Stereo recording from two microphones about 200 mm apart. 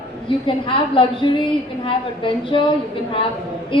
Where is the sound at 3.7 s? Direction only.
25° left (ahead or behind).